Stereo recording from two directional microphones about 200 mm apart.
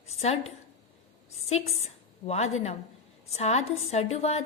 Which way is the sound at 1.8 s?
30° left (ahead or behind).